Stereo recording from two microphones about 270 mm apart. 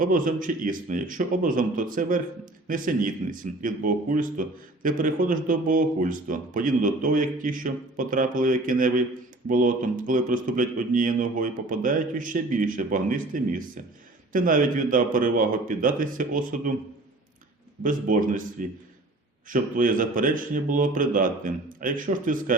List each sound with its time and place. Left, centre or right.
0.0 s speech: right
17.8 s speech: right
19.5 s speech: right